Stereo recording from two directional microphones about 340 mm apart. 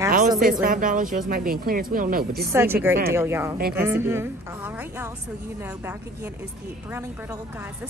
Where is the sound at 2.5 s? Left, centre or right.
Centre.